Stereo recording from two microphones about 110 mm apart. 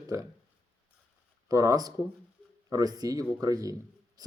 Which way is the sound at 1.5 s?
30° right (ahead or behind).